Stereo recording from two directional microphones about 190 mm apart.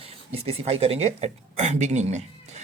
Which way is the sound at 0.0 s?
30° right (ahead or behind).